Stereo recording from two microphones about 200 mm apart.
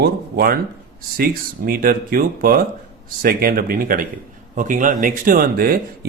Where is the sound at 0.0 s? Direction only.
50° right (ahead or behind).